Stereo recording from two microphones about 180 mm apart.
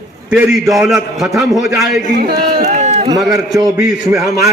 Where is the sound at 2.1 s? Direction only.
55° right (ahead or behind).